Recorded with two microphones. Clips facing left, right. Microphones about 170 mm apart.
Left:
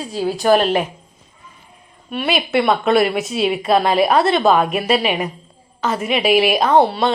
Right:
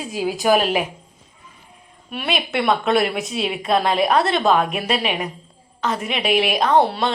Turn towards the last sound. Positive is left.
turn(degrees=0)  # may be behind; listen again after turning